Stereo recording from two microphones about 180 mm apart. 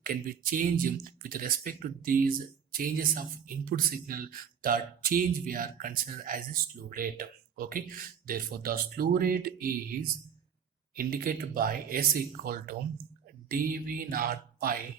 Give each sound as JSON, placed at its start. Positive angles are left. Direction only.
{"t": 0.0, "sound": "speech", "side_deg": -50}